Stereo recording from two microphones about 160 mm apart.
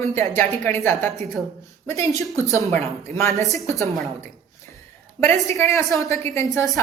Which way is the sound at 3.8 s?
Centre (ahead or behind).